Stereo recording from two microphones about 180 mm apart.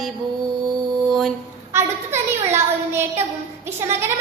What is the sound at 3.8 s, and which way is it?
Speech, 15° right (ahead or behind).